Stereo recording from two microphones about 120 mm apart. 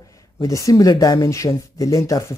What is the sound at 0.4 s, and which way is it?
Speech, 30° left (ahead or behind).